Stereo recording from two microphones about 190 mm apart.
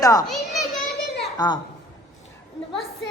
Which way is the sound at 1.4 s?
20° left (ahead or behind).